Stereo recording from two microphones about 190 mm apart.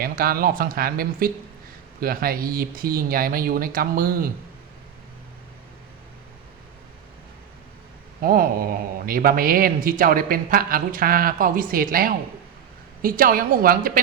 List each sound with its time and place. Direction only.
0.0 s speech: 50° right (ahead or behind)
8.2 s speech: 50° right (ahead or behind)